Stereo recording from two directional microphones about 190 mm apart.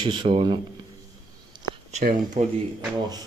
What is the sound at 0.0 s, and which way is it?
Speech, 25° right (ahead or behind).